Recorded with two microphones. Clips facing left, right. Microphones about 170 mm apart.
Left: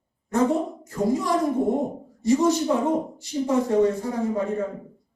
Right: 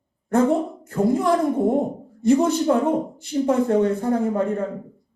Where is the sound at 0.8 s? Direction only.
55° right (ahead or behind).